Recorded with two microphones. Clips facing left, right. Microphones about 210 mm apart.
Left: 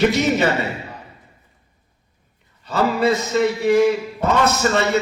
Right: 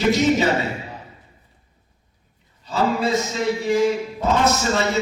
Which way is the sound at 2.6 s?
60° left (ahead or behind).